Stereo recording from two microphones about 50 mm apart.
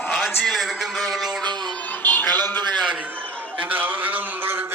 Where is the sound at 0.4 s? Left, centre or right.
Centre.